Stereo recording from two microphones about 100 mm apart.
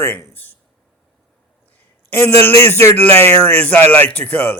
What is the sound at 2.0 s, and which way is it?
A man's voice, 25° left (ahead or behind).